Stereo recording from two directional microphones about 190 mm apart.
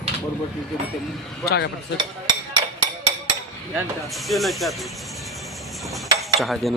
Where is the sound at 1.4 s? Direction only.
65° left (ahead or behind).